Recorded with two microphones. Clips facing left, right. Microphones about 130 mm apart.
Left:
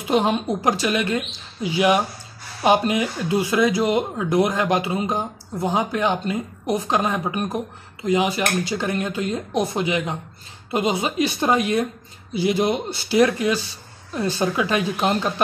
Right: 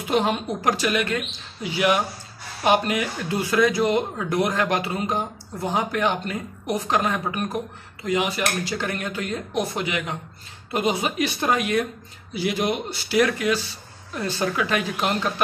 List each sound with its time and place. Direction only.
0.1 s speech: 20° left (ahead or behind)